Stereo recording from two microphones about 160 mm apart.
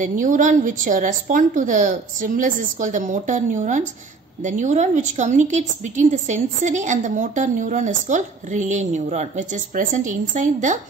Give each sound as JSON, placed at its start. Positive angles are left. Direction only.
{"t": 0.0, "sound": "a woman's voice", "side_deg": -55}